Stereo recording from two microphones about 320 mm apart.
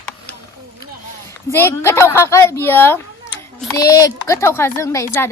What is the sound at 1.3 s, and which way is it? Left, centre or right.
Speech, centre.